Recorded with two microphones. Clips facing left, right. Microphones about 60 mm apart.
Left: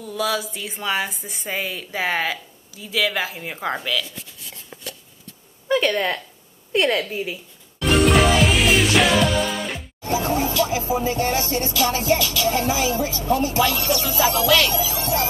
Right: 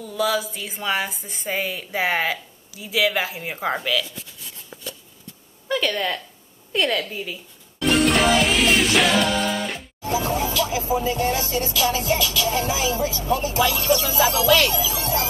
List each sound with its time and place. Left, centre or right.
0.1 s speech: centre
5.9 s a woman's voice: centre
7.8 s music: centre
10.0 s a sound: left
10.5 s music: left